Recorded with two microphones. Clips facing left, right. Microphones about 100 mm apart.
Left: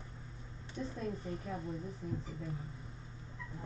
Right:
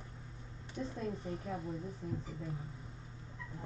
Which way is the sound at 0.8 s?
30° right (ahead or behind).